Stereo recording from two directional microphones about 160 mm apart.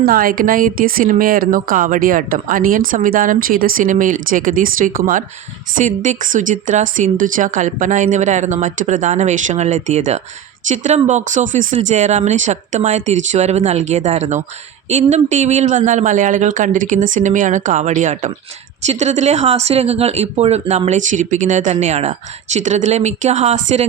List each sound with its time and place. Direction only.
0.0 s speech: 65° right (ahead or behind); by 23.8 s 45° right (ahead or behind)